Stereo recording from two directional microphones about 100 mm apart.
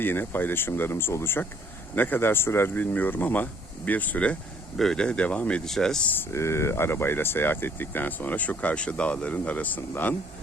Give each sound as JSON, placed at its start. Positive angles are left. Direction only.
{"t": 0.0, "sound": "speech", "side_deg": 20}
{"t": 6.1, "sound": "speech", "side_deg": 30}